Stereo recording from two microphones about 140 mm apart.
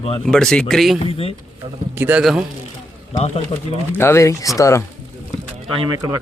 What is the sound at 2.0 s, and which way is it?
Speech, 15° right (ahead or behind).